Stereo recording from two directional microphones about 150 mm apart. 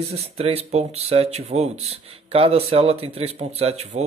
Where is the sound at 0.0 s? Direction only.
45° right (ahead or behind).